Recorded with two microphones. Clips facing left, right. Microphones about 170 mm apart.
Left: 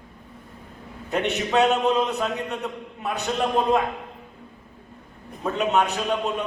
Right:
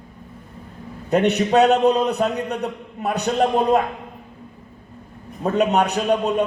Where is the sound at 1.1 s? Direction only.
40° right (ahead or behind).